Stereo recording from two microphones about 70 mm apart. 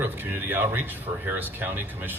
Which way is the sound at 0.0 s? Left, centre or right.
Right.